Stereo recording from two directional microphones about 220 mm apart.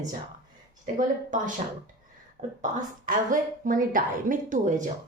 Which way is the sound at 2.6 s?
35° right (ahead or behind).